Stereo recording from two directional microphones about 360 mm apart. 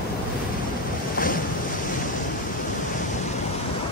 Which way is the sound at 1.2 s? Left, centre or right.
Left.